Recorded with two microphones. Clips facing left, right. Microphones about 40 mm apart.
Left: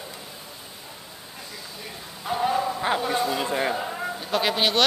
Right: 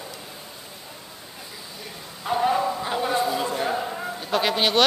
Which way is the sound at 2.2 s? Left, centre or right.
Centre.